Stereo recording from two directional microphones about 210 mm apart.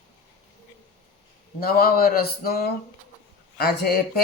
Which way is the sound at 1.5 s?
45° left (ahead or behind).